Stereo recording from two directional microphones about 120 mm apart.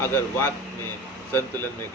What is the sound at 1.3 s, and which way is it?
Speech, 20° left (ahead or behind).